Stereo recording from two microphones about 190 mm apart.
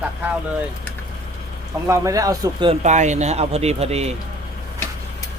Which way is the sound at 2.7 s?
35° right (ahead or behind).